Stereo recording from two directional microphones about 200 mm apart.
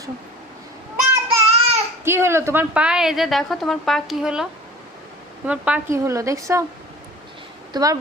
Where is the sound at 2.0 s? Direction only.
10° right (ahead or behind).